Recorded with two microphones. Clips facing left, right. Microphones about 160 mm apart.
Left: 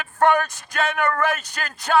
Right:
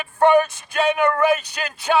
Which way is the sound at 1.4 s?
45° left (ahead or behind).